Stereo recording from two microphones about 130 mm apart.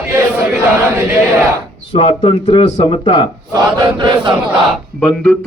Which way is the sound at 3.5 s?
35° right (ahead or behind).